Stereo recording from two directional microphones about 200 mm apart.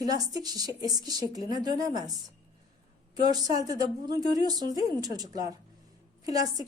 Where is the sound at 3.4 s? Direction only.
20° right (ahead or behind).